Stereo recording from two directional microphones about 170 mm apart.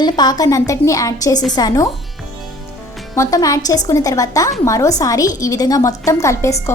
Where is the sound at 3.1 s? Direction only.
20° left (ahead or behind).